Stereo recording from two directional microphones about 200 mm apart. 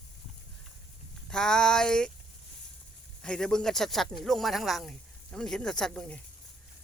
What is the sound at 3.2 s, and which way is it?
Speech, 5° left (ahead or behind).